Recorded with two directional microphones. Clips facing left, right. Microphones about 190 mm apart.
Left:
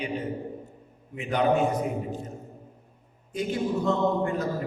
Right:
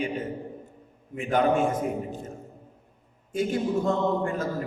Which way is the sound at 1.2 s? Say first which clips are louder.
Right 1 dB; 50° right (ahead or behind).